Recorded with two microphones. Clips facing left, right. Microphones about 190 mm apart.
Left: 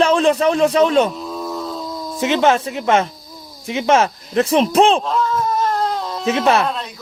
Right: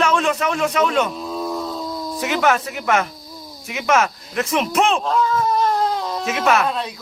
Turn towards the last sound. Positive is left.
turn(degrees=30)  # may be behind; listen again after turning